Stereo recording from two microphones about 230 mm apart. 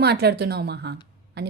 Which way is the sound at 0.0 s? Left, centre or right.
Right.